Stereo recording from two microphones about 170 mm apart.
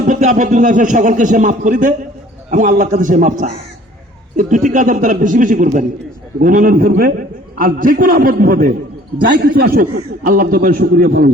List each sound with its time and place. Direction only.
0.1 s a man's voice: 45° right (ahead or behind)
4.4 s a man's voice: 50° right (ahead or behind)